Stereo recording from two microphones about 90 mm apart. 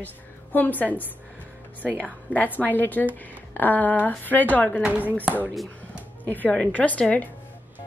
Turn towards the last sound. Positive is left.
turn(degrees=15)  # may be behind; listen again after turning